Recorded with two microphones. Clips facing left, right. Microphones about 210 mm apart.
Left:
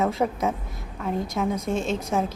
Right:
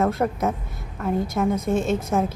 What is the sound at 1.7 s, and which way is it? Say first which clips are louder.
Speech: right 5 dB; 55° right (ahead or behind).